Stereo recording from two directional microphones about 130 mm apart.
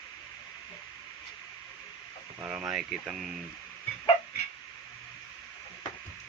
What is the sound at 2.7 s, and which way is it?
Speech, 5° right (ahead or behind).